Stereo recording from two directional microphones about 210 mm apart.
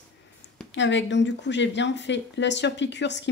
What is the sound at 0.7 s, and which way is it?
Speech, 60° left (ahead or behind).